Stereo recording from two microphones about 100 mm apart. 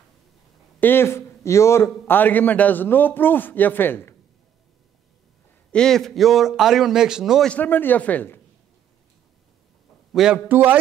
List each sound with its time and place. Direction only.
0.7 s a man's voice: 20° left (ahead or behind)
5.7 s a man's voice: 5° left (ahead or behind)
7.4 s speech: 15° left (ahead or behind)
10.1 s a man's voice: 5° right (ahead or behind)
10.5 s a man's voice: 20° right (ahead or behind)